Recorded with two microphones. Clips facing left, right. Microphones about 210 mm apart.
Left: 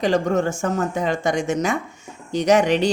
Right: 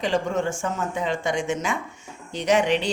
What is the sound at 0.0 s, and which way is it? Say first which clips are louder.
Speech: left 4 dB; 40° left (ahead or behind).